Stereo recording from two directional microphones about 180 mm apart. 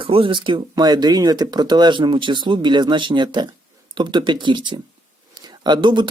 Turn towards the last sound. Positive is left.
turn(degrees=-25)  # may be behind; listen again after turning